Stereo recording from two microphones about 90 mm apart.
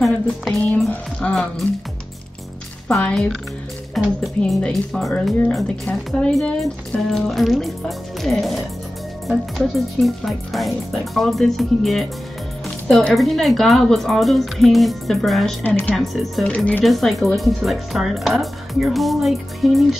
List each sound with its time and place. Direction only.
0.0 s speech: centre (ahead or behind)
1.2 s speech: 10° left (ahead or behind)
2.9 s speech: 5° left (ahead or behind)
5.9 s speech: 15° left (ahead or behind)
6.6 s speech: 5° left (ahead or behind)
13.1 s speech: centre (ahead or behind)
15.6 s speech: 20° left (ahead or behind)
16.0 s speech: centre (ahead or behind)
16.4 s speech: 15° left (ahead or behind)
16.8 s speech: centre (ahead or behind)